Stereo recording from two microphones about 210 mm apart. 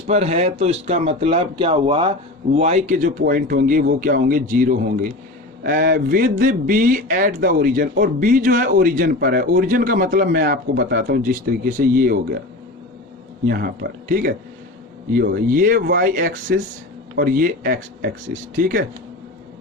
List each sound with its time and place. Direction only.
0.1 s a man's voice: 30° right (ahead or behind)
13.5 s a man's voice: 45° right (ahead or behind)